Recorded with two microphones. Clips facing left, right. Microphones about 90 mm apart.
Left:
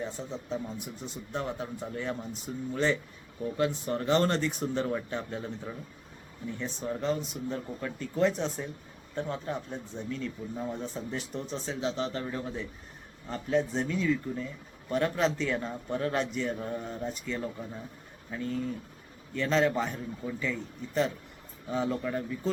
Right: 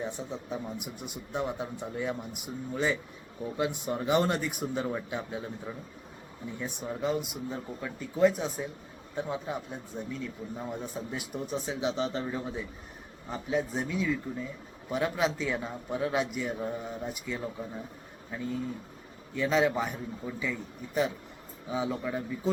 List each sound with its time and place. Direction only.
0.0 s a man's voice: 15° right (ahead or behind)